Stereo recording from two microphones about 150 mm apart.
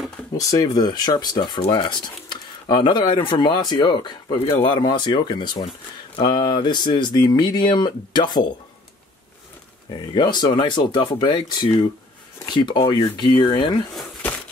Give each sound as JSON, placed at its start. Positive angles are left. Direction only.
{"t": 0.4, "sound": "speech", "side_deg": 25}
{"t": 10.1, "sound": "speech", "side_deg": 30}